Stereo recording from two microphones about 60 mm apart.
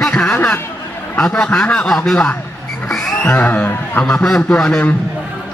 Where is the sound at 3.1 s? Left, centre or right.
Left.